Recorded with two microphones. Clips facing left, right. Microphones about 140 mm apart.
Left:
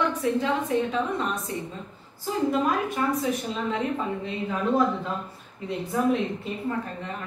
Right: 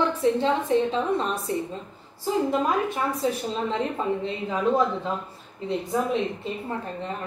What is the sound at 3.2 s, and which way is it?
Speech, 30° right (ahead or behind).